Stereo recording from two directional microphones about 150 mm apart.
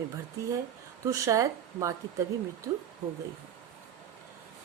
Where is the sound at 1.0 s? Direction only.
20° right (ahead or behind).